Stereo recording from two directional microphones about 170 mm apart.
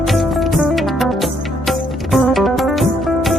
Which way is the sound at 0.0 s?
Centre (ahead or behind).